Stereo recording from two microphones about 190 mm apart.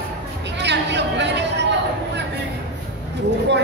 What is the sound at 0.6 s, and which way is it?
Chatter, 65° right (ahead or behind).